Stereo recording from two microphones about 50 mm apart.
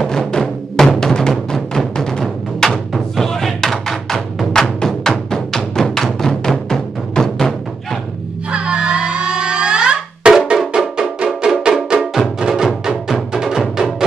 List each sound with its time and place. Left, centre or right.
0.0 s music: centre
3.2 s thump: centre
4.7 s music: centre
8.5 s music: right